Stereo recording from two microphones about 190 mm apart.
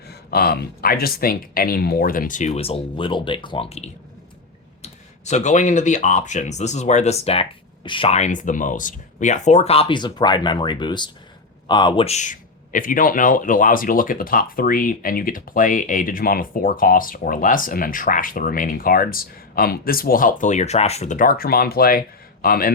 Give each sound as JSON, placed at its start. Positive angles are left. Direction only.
{"t": 0.1, "sound": "speech", "side_deg": 55}